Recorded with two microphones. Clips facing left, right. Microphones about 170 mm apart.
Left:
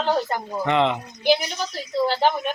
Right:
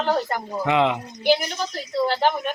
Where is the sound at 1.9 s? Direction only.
10° left (ahead or behind).